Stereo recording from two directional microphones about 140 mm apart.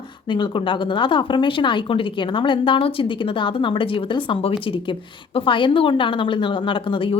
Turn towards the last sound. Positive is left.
turn(degrees=40)  # may be behind; listen again after turning